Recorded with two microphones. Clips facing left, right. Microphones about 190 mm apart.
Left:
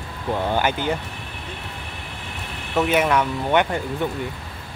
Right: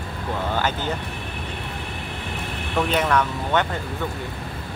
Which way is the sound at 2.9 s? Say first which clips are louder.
Left 2 dB; 10° left (ahead or behind).